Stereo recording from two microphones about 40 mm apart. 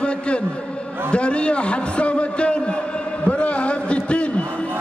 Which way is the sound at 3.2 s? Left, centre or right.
Left.